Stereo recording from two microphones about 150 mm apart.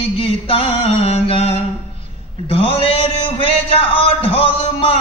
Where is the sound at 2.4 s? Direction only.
40° left (ahead or behind).